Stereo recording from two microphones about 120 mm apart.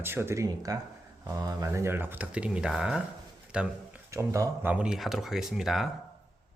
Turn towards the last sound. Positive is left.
turn(degrees=0)  # may be behind; listen again after turning